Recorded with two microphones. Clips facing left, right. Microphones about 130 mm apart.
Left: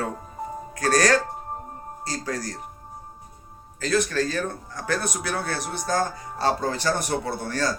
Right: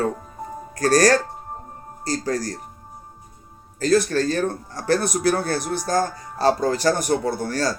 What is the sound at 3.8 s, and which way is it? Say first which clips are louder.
Speech: right 5 dB; 35° right (ahead or behind).